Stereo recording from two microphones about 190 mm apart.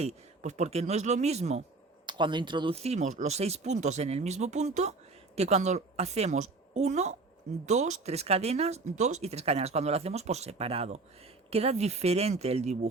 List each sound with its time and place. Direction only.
0.0 s speech: 35° right (ahead or behind)
2.0 s speech: 25° right (ahead or behind)